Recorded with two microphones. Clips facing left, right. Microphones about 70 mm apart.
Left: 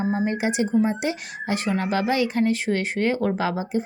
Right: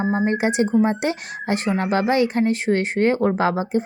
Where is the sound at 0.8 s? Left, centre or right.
Right.